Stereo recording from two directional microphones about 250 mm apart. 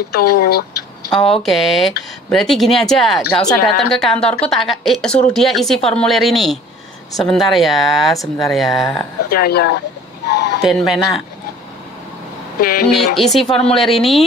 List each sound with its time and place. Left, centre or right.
0.1 s speech: left
1.4 s a woman's voice: centre
9.3 s speech: left
10.2 s a sound: left
10.6 s a woman's voice: centre
12.5 s speech: left
12.9 s a woman's voice: centre